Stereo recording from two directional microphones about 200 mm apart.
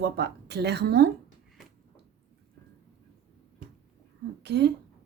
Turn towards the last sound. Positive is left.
turn(degrees=-60)  # may be behind; listen again after turning